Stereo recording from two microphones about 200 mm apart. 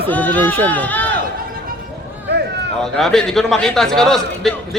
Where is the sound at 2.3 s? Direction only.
55° right (ahead or behind).